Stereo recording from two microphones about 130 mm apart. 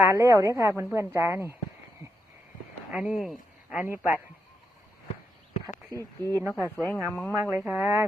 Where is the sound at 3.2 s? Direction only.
10° right (ahead or behind).